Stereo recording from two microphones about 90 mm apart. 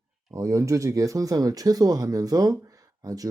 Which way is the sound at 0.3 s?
35° right (ahead or behind).